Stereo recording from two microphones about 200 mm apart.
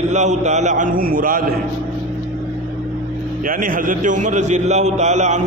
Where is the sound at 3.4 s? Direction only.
45° right (ahead or behind).